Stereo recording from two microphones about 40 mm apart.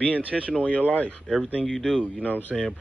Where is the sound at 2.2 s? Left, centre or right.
Left.